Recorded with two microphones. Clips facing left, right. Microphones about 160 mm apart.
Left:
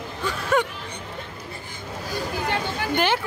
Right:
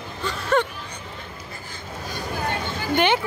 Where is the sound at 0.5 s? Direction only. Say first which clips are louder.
Right 1 dB; 10° left (ahead or behind).